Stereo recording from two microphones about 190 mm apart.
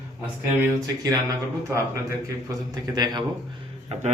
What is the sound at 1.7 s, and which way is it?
A man's voice, 15° right (ahead or behind).